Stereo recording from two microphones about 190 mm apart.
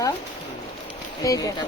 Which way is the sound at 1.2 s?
20° left (ahead or behind).